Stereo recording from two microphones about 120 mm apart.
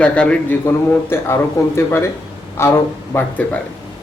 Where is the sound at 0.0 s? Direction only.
10° left (ahead or behind).